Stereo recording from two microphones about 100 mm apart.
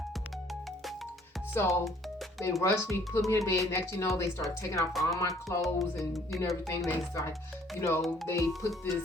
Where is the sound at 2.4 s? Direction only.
30° left (ahead or behind).